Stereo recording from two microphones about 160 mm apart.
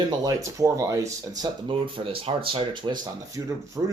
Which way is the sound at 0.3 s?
20° right (ahead or behind).